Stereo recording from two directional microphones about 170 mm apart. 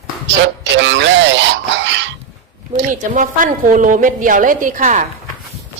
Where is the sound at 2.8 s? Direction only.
50° right (ahead or behind).